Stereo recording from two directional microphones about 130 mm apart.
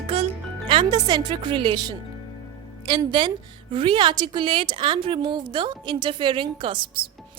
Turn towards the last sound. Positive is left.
turn(degrees=-45)  # may be behind; listen again after turning